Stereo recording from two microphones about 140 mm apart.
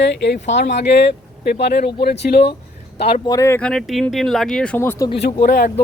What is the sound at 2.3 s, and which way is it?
Speech, 90° left.